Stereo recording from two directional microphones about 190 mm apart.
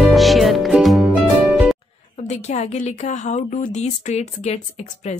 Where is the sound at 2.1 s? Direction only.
35° left (ahead or behind).